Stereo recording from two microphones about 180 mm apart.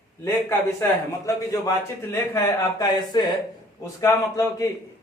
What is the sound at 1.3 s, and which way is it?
Speech, 15° left (ahead or behind).